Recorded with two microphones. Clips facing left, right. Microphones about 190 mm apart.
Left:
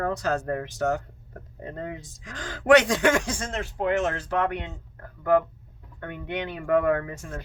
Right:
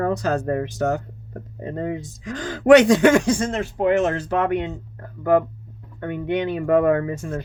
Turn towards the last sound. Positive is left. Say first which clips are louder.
# right 5 dB
turn(degrees=-25)  # may be behind; listen again after turning